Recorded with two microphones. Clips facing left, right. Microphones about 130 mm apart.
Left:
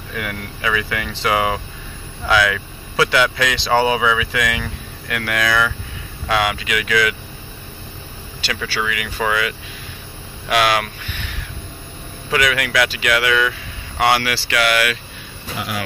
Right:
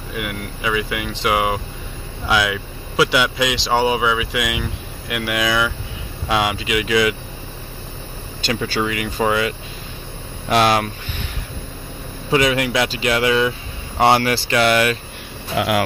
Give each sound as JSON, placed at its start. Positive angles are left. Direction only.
{"t": 0.1, "sound": "speech", "side_deg": -15}
{"t": 8.5, "sound": "speech", "side_deg": -35}